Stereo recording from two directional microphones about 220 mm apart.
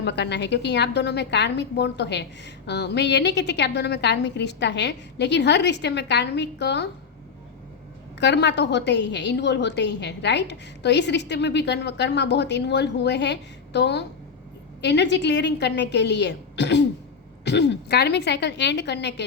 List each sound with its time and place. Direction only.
0.0 s a woman's voice: 50° left (ahead or behind)
8.2 s a woman's voice: 50° left (ahead or behind)